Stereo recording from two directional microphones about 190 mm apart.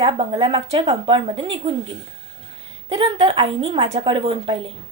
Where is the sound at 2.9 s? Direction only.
25° right (ahead or behind).